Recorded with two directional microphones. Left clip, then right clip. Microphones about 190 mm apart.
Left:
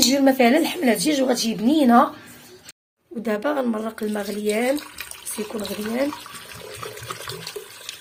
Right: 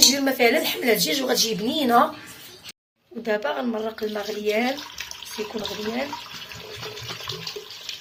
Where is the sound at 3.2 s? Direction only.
65° left (ahead or behind); by 4.3 s 50° left (ahead or behind).